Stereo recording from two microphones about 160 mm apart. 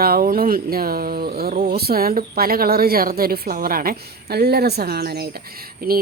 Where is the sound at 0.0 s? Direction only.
65° right (ahead or behind).